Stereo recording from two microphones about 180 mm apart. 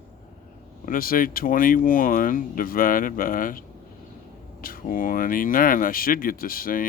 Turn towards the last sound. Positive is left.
turn(degrees=50)  # may be behind; listen again after turning